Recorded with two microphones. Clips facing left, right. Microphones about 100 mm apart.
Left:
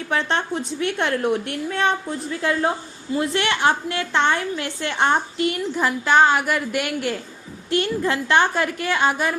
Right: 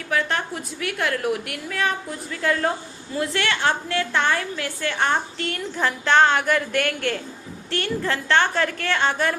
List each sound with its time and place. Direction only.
0.1 s a woman's voice: 25° left (ahead or behind)